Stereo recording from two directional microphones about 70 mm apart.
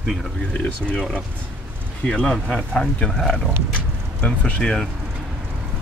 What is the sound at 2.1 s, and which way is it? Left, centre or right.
Speech, centre.